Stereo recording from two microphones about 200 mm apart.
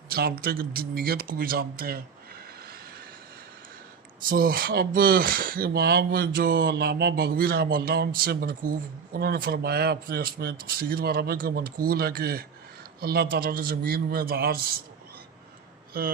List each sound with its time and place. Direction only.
0.1 s speech: 50° right (ahead or behind)
4.2 s speech: 45° right (ahead or behind)
15.9 s speech: 45° right (ahead or behind)